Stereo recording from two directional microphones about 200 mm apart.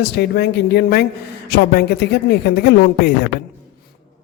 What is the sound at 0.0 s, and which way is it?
A man's voice, 55° left (ahead or behind).